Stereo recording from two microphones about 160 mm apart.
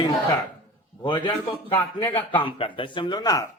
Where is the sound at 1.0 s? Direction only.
30° left (ahead or behind).